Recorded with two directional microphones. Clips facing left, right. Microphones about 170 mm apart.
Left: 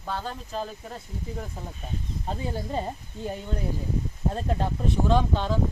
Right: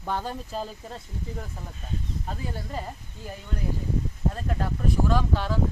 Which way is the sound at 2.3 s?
25° left (ahead or behind).